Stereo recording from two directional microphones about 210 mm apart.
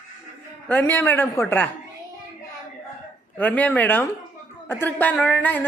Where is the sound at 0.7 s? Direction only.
10° left (ahead or behind).